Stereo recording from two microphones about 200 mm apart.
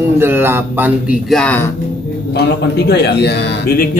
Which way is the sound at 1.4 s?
10° left (ahead or behind).